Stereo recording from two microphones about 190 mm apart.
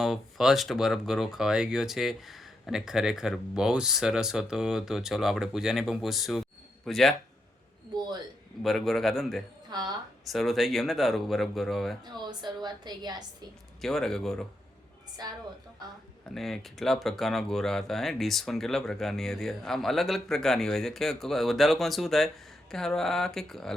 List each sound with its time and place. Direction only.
0.0 s speech: centre (ahead or behind)
8.6 s speech: centre (ahead or behind)
9.6 s speech: 20° right (ahead or behind)
10.2 s speech: centre (ahead or behind)
12.0 s a woman's voice: 25° right (ahead or behind)
13.8 s speech: centre (ahead or behind)
15.2 s a woman's voice: 20° right (ahead or behind)
16.3 s speech: centre (ahead or behind)